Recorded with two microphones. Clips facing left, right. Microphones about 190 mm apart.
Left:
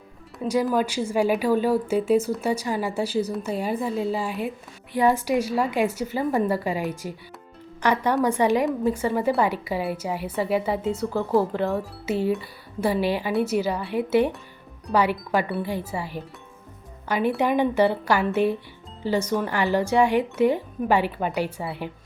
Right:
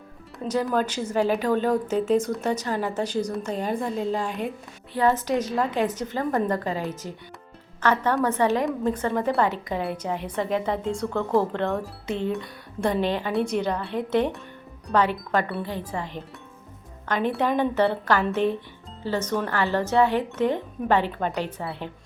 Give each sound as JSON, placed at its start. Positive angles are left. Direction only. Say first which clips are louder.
{"t": 0.4, "sound": "a woman's voice", "louder": "left 2 dB", "side_deg": 10}